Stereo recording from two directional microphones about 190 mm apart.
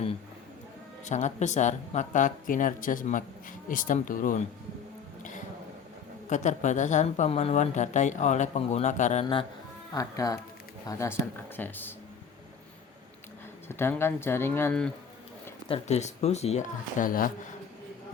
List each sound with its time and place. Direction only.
1.0 s a woman's voice: 40° left (ahead or behind)
6.2 s a woman's voice: 40° left (ahead or behind)
9.9 s speech: 20° left (ahead or behind)
13.7 s speech: 10° left (ahead or behind)
15.7 s a woman's voice: 35° left (ahead or behind)